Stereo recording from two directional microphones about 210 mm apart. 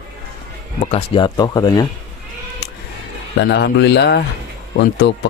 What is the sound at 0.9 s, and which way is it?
Speech, 25° left (ahead or behind).